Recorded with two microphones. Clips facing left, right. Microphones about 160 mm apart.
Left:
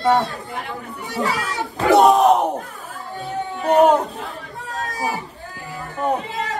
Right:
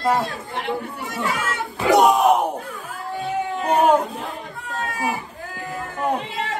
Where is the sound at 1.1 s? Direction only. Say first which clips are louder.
Left 3 dB; 35° left (ahead or behind).